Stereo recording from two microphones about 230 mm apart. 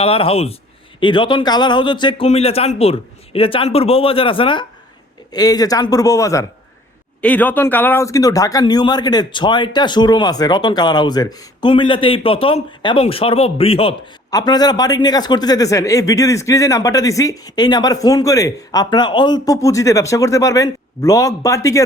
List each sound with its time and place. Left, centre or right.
0.0 s a man's voice: left